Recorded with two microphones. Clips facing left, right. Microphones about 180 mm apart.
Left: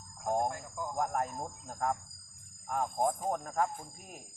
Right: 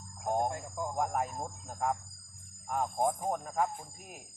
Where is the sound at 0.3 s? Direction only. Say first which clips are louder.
Right 1 dB; 25° right (ahead or behind).